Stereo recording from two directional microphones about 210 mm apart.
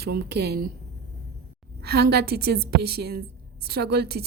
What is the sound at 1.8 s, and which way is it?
A woman's voice, 50° right (ahead or behind).